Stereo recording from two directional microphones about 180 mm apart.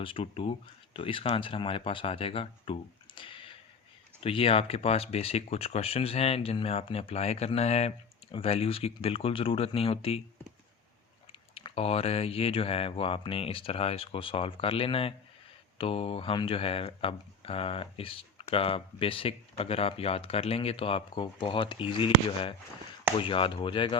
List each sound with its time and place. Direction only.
0.0 s speech: 30° left (ahead or behind)
3.2 s a sound: 30° left (ahead or behind)
4.2 s speech: 30° left (ahead or behind)
11.3 s speech: 30° left (ahead or behind)